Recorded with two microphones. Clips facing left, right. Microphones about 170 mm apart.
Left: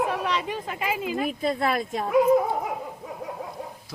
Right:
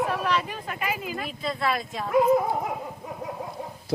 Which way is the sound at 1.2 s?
45° left (ahead or behind).